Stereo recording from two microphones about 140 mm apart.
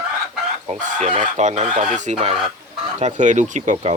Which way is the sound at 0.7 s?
60° right (ahead or behind).